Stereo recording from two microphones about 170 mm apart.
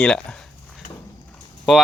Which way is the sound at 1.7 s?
Centre (ahead or behind).